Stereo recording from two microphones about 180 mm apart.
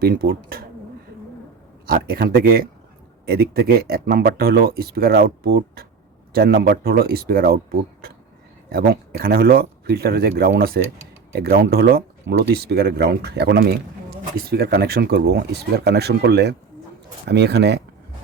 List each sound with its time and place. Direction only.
0.0 s speech: 60° right (ahead or behind)
1.9 s speech: 55° right (ahead or behind)
8.7 s speech: 55° right (ahead or behind)